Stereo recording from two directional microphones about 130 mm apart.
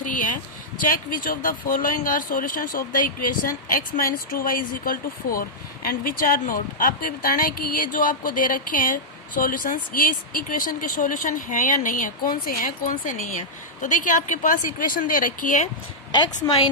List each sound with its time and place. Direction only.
0.0 s a sound: 85° left
0.9 s speech: 90° left
13.8 s speech: 75° left (ahead or behind)